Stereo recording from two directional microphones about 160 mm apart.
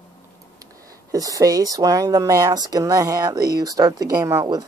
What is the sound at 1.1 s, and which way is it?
Speech, 20° right (ahead or behind).